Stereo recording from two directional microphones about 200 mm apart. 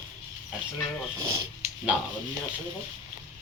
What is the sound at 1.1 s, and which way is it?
Speech, 15° right (ahead or behind).